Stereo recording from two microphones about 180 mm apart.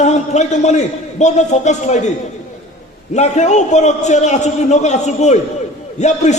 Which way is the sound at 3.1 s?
40° left (ahead or behind).